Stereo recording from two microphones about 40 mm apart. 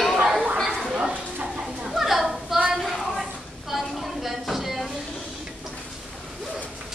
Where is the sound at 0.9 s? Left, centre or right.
Right.